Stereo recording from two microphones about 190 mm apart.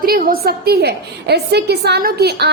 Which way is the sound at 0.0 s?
50° right (ahead or behind).